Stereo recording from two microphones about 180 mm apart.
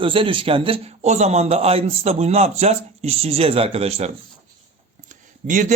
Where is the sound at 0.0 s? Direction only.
30° right (ahead or behind).